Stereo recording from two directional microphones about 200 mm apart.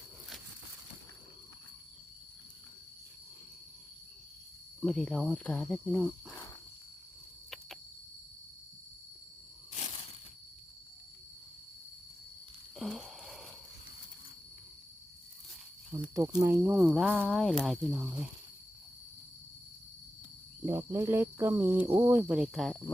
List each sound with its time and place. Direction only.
4.8 s speech: centre (ahead or behind)
12.7 s a sound: centre (ahead or behind)
16.0 s speech: 20° right (ahead or behind)
20.7 s speech: 15° right (ahead or behind)